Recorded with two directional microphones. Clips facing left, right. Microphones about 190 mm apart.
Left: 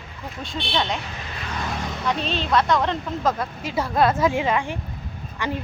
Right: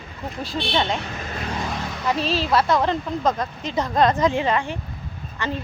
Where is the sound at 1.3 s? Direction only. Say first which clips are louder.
Right 5 dB; 45° right (ahead or behind).